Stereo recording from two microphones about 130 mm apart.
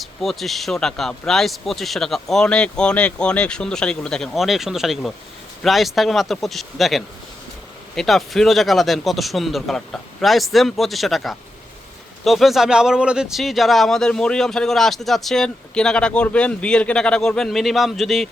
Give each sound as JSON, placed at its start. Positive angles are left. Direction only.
{"t": 0.0, "sound": "speech", "side_deg": 0}